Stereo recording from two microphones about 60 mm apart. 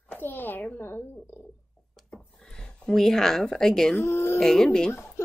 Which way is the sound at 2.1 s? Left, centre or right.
Centre.